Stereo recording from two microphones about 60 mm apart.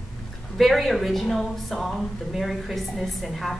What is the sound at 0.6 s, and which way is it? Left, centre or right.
A woman's voice, centre.